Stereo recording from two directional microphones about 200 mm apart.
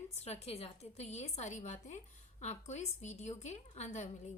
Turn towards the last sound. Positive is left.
turn(degrees=35)  # may be behind; listen again after turning